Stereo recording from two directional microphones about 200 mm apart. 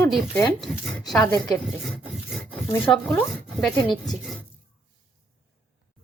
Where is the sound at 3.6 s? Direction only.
Centre (ahead or behind).